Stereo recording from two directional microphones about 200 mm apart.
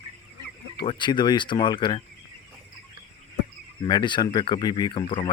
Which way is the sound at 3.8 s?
25° left (ahead or behind).